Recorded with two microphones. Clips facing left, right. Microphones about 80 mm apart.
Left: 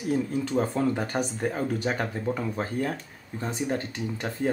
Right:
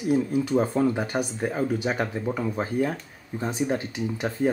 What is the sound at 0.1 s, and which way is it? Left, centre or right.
Speech, centre.